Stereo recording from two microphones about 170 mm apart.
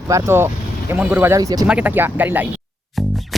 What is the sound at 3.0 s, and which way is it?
Music, centre (ahead or behind).